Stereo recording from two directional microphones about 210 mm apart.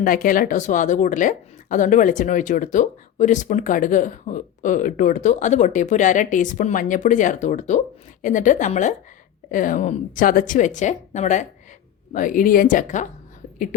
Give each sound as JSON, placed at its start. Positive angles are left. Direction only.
{"t": 0.0, "sound": "a woman's voice", "side_deg": 40}